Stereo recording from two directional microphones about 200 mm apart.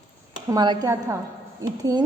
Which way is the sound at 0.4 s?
20° right (ahead or behind).